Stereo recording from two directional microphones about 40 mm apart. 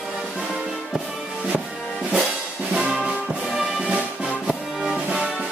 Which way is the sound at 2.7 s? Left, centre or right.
Right.